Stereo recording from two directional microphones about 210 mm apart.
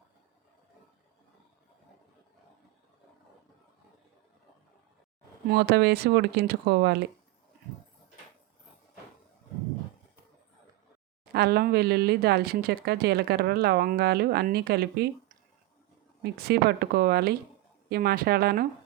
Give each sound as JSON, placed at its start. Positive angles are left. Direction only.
{"t": 5.5, "sound": "speech", "side_deg": -50}
{"t": 11.3, "sound": "speech", "side_deg": -50}
{"t": 16.2, "sound": "speech", "side_deg": -50}